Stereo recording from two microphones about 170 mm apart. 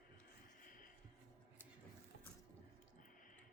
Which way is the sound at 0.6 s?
55° left (ahead or behind).